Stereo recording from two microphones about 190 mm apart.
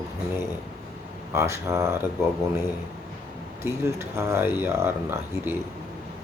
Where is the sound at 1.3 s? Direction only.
15° right (ahead or behind).